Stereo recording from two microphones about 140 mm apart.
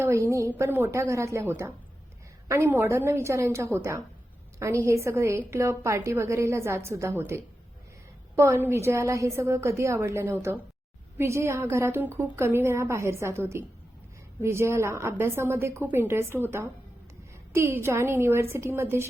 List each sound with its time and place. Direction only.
0.0 s a woman's voice: 20° right (ahead or behind)